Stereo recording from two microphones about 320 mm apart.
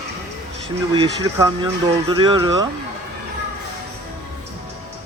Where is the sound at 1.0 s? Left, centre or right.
Centre.